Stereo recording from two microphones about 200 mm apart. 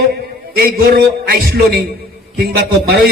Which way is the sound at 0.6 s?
50° right (ahead or behind).